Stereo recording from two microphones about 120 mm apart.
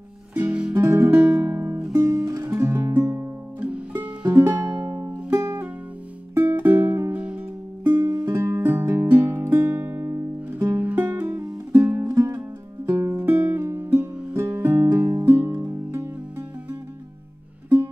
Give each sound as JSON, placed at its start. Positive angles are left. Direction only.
{"t": 0.3, "sound": "music", "side_deg": -10}
{"t": 0.7, "sound": "guitar", "side_deg": -25}
{"t": 1.1, "sound": "music", "side_deg": -10}
{"t": 1.5, "sound": "music", "side_deg": -20}
{"t": 1.9, "sound": "music", "side_deg": -5}
{"t": 2.2, "sound": "music", "side_deg": -30}
{"t": 2.6, "sound": "music", "side_deg": -20}
{"t": 3.6, "sound": "music", "side_deg": -10}
{"t": 8.4, "sound": "music", "side_deg": -25}
{"t": 12.1, "sound": "music", "side_deg": -30}
{"t": 12.4, "sound": "music", "side_deg": -15}